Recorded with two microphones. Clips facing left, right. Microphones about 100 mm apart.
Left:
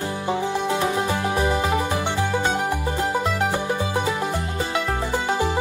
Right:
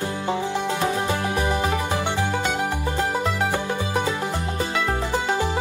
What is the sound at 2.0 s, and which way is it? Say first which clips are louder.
Music: left 1 dB; 20° right (ahead or behind).